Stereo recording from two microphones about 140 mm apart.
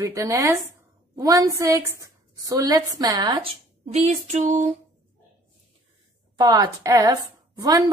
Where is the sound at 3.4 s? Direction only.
40° right (ahead or behind).